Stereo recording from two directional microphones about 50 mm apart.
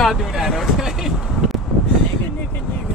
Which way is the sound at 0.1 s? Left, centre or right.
Centre.